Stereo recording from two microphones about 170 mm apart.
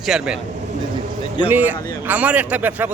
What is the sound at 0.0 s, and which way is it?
Speech, 5° right (ahead or behind).